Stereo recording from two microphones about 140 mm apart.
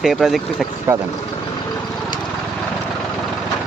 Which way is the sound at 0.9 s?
15° right (ahead or behind).